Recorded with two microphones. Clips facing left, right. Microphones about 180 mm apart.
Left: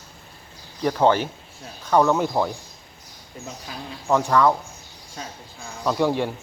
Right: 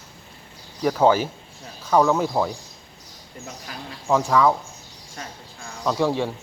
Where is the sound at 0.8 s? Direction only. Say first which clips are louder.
Right 1 dB; 5° right (ahead or behind).